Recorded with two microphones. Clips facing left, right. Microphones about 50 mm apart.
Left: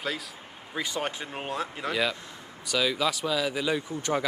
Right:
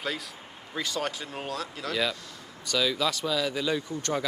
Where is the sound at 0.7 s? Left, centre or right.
Centre.